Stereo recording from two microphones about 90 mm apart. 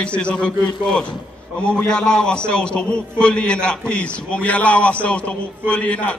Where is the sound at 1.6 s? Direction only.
10° left (ahead or behind).